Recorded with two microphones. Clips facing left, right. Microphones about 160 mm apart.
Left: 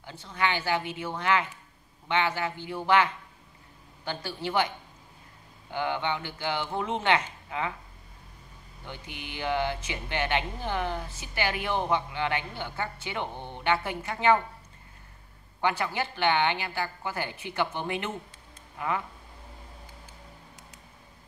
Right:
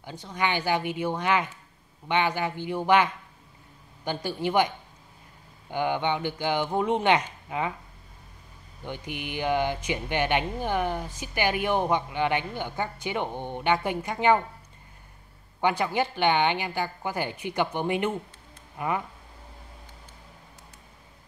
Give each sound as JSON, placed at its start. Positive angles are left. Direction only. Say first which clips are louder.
{"t": 0.0, "sound": "speech", "louder": "right 1 dB", "side_deg": -15}
{"t": 5.7, "sound": "speech", "louder": "right 3 dB", "side_deg": -15}
{"t": 8.8, "sound": "speech", "louder": "right 7 dB", "side_deg": -15}
{"t": 15.6, "sound": "speech", "louder": "right 4 dB", "side_deg": -15}